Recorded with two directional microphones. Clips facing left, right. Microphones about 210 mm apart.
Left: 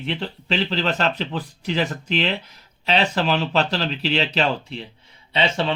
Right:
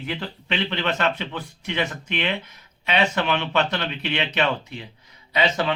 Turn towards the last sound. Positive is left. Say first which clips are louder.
# even
turn(degrees=30)  # may be behind; listen again after turning